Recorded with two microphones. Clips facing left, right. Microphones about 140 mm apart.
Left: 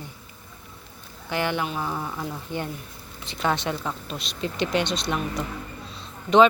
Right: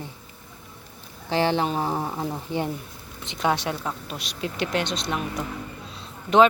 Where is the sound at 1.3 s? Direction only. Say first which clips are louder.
Right 4 dB; 30° right (ahead or behind).